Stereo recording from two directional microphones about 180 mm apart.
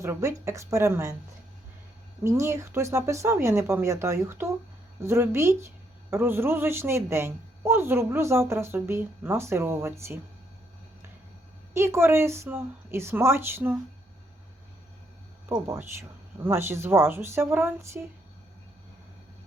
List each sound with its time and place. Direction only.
0.0 s a woman's voice: 15° right (ahead or behind)
2.2 s a woman's voice: 15° right (ahead or behind)
11.7 s a woman's voice: 15° right (ahead or behind)
15.4 s a woman's voice: 15° right (ahead or behind)